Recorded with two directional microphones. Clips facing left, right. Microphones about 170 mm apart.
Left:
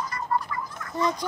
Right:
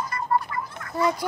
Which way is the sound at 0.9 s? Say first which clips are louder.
Right 2 dB; 10° right (ahead or behind).